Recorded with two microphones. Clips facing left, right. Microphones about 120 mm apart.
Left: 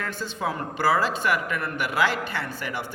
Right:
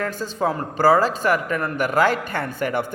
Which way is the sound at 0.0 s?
40° right (ahead or behind).